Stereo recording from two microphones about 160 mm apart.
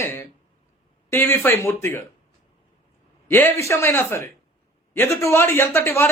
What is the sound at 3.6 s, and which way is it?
A man's voice, 15° left (ahead or behind).